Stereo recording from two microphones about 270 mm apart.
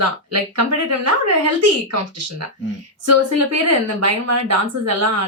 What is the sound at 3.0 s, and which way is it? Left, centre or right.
Speech, right.